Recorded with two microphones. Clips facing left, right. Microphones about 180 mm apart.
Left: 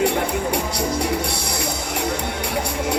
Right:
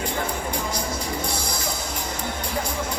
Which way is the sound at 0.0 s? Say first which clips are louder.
Left 7 dB; 70° left (ahead or behind).